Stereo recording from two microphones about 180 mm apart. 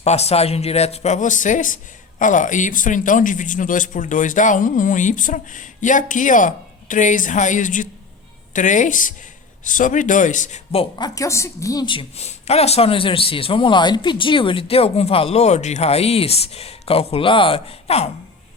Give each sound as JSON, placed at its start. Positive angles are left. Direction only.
{"t": 0.0, "sound": "speech", "side_deg": 35}